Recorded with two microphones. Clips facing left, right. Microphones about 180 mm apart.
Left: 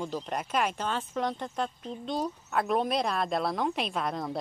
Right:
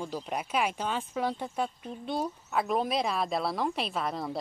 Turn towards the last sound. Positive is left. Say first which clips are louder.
# left 1 dB
turn(degrees=0)  # may be behind; listen again after turning